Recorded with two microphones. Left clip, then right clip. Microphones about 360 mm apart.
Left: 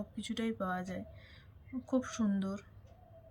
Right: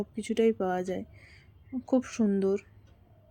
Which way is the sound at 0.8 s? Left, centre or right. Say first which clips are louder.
Right 10 dB; right.